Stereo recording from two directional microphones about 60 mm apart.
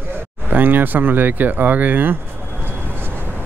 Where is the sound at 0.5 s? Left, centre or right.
Right.